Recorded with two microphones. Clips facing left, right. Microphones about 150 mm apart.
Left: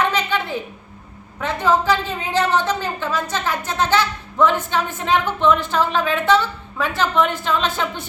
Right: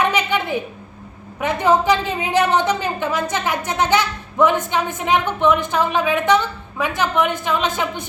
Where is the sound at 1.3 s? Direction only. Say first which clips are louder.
Right 2 dB; 15° right (ahead or behind).